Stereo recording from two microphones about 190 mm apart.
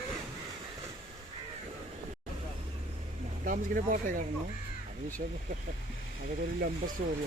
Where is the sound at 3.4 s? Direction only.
45° right (ahead or behind).